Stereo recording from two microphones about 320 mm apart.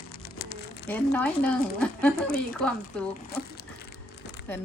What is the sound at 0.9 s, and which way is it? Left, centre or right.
Speech, centre.